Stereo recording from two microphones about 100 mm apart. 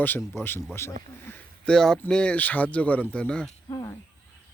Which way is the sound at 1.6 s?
5° left (ahead or behind).